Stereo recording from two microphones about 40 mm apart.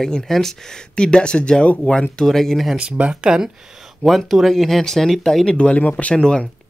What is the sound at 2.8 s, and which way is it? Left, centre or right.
Speech, right.